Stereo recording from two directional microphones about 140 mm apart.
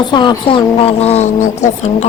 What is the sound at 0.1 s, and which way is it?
A woman's voice, 35° left (ahead or behind).